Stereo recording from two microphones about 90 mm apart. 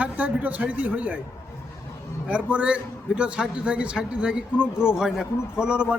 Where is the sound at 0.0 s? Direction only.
15° right (ahead or behind).